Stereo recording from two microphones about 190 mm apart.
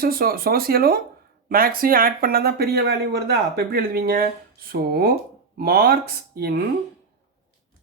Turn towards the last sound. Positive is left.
turn(degrees=-55)  # may be behind; listen again after turning